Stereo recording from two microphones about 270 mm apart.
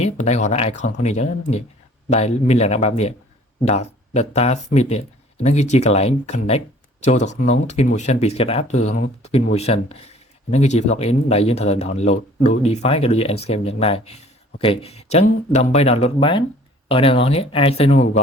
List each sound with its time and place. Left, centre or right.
0.0 s speech: left